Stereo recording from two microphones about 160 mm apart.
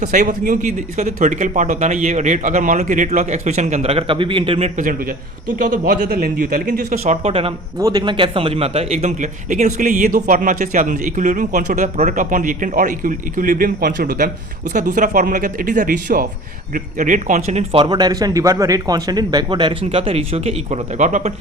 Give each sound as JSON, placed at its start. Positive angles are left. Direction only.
{"t": 0.0, "sound": "speech", "side_deg": -50}
{"t": 4.8, "sound": "a man's voice", "side_deg": -60}
{"t": 7.0, "sound": "speech", "side_deg": -40}
{"t": 7.8, "sound": "a man's voice", "side_deg": -25}
{"t": 14.7, "sound": "a man's voice", "side_deg": -50}